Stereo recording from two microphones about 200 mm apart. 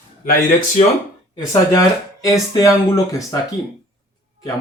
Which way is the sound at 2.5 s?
15° left (ahead or behind).